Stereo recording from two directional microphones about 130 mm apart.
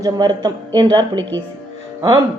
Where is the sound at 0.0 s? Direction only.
35° right (ahead or behind).